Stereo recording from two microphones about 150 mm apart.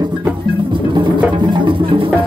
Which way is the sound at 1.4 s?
30° right (ahead or behind).